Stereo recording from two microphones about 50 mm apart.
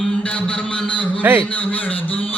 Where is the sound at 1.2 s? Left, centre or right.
Right.